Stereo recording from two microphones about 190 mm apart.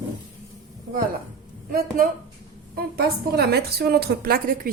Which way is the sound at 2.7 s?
55° right (ahead or behind).